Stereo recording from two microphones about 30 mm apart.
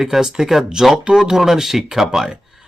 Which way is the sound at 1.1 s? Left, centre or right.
Right.